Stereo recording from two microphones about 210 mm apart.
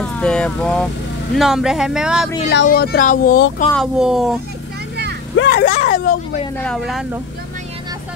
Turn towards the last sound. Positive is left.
turn(degrees=0)  # may be behind; listen again after turning